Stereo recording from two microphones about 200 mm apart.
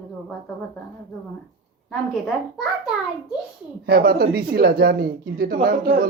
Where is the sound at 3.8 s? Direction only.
50° right (ahead or behind).